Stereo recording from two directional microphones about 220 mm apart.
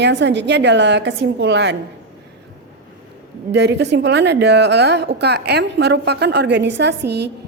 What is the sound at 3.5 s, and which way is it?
A woman's voice, 50° right (ahead or behind).